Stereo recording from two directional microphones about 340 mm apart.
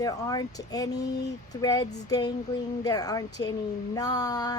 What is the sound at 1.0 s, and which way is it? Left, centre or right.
Speech, left.